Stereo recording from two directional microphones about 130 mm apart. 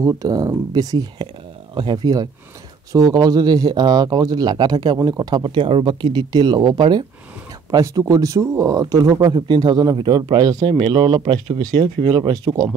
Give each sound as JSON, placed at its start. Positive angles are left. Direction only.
{"t": 0.0, "sound": "speech", "side_deg": -25}